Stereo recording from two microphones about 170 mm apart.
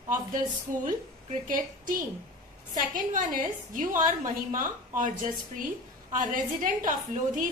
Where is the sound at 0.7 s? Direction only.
50° right (ahead or behind).